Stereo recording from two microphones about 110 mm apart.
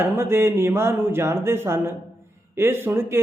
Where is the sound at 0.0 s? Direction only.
25° right (ahead or behind).